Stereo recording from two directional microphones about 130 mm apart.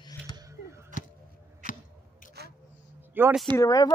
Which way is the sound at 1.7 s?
90° left.